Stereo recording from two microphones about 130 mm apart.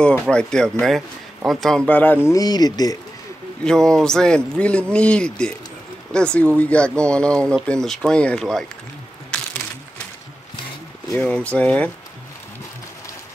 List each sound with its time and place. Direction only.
0.0 s speech: 10° left (ahead or behind)
2.2 s speech: 30° left (ahead or behind)
3.6 s speech: 5° left (ahead or behind)
11.1 s speech: 10° left (ahead or behind)